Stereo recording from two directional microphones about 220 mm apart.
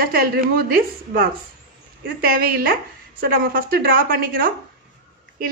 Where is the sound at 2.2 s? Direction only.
45° right (ahead or behind).